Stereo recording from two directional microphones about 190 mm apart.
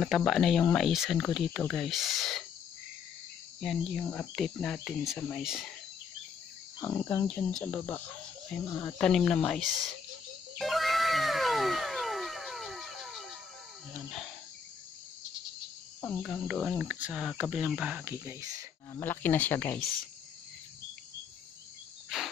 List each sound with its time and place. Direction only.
0.0 s speech: centre (ahead or behind)
3.6 s speech: centre (ahead or behind)
6.8 s cricket: 20° left (ahead or behind)
7.2 s speech: 5° left (ahead or behind)
10.6 s cat: centre (ahead or behind)
16.0 s speech: 5° left (ahead or behind); by 18.7 s 15° right (ahead or behind)
18.9 s speech: 10° left (ahead or behind)
22.1 s insect: centre (ahead or behind)